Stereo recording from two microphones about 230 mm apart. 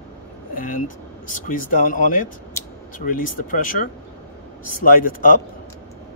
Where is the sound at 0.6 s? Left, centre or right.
Left.